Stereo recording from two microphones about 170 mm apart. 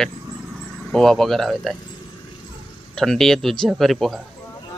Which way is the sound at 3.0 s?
Centre (ahead or behind).